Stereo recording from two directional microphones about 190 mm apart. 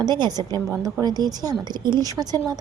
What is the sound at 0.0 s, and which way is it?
Speech, 20° right (ahead or behind).